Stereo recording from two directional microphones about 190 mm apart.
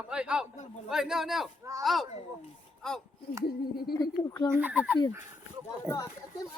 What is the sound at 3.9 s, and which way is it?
Speech, 20° left (ahead or behind).